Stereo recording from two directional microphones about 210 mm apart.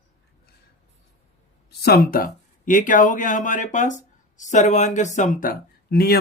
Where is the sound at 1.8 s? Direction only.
45° left (ahead or behind).